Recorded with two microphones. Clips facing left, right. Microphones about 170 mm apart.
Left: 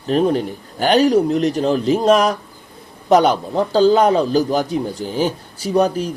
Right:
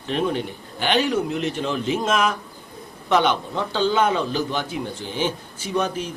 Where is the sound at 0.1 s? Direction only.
40° left (ahead or behind).